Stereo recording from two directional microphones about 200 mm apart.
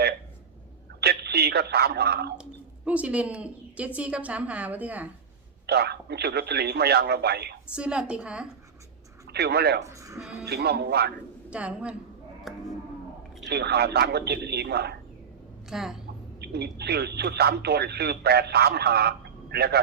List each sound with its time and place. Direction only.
1.0 s a woman's voice: 50° right (ahead or behind)
2.4 s a woman's voice: 5° right (ahead or behind)
5.6 s speech: 55° right (ahead or behind)
7.7 s a woman's voice: 5° right (ahead or behind)
9.3 s speech: 55° right (ahead or behind)
9.8 s a woman's voice: 15° right (ahead or behind)
10.4 s speech: 55° right (ahead or behind)
11.5 s a woman's voice: 5° right (ahead or behind)
12.5 s a sound: centre (ahead or behind)
13.4 s a man's voice: 55° right (ahead or behind)
15.7 s a woman's voice: centre (ahead or behind)
16.4 s speech: 55° right (ahead or behind)